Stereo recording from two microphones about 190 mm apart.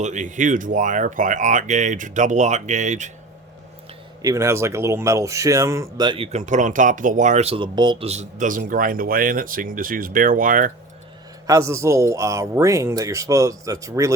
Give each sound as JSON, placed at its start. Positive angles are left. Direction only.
{"t": 0.0, "sound": "speech", "side_deg": -40}
{"t": 4.2, "sound": "speech", "side_deg": -15}
{"t": 11.4, "sound": "speech", "side_deg": -15}